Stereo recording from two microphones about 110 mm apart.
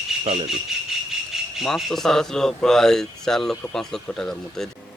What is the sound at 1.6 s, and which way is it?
A man's voice, centre (ahead or behind).